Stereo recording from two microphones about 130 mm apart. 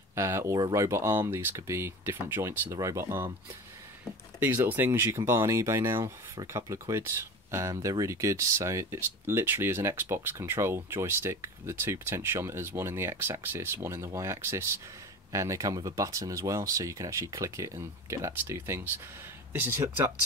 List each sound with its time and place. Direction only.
0.1 s speech: 20° right (ahead or behind)
4.4 s speech: 15° right (ahead or behind)